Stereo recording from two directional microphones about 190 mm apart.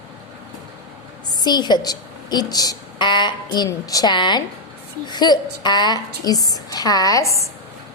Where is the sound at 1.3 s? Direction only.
20° left (ahead or behind).